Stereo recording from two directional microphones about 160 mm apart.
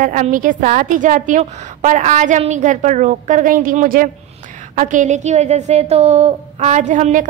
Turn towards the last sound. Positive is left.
turn(degrees=-50)  # may be behind; listen again after turning